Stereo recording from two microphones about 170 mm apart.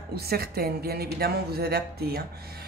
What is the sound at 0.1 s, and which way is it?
A woman's voice, 65° right (ahead or behind).